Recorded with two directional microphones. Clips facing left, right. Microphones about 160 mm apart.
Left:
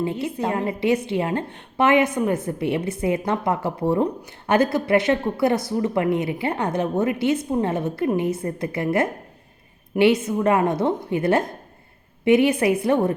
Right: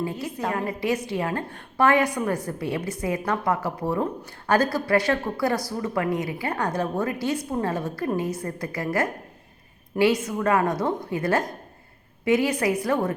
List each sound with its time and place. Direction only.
0.0 s a woman's voice: 25° left (ahead or behind)